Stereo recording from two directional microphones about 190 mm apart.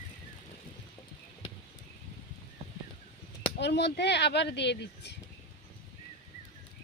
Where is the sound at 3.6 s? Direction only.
65° left (ahead or behind).